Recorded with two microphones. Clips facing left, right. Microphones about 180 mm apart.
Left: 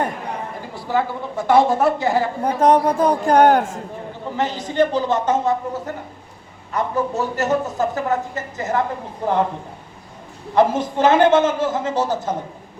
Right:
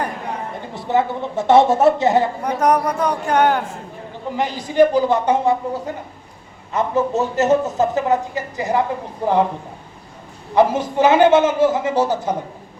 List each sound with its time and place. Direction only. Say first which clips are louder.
0.7 s speech: right 3 dB; 20° right (ahead or behind)
2.4 s speech: left 2 dB; 25° left (ahead or behind)
4.4 s a woman's voice: right 4 dB; 10° right (ahead or behind)
10.5 s a woman's voice: right 1 dB; 10° right (ahead or behind)